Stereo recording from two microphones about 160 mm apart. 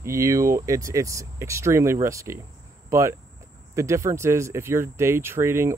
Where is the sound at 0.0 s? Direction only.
20° right (ahead or behind).